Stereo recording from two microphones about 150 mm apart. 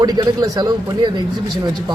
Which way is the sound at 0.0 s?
25° right (ahead or behind).